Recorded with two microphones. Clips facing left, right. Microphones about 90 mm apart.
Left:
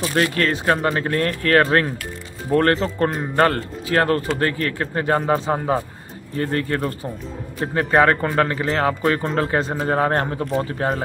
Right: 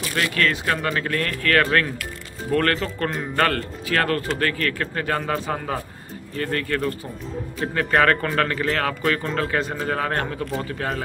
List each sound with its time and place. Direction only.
0.0 s a man's voice: 30° left (ahead or behind)